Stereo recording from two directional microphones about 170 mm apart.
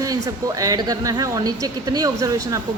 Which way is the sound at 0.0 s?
20° right (ahead or behind).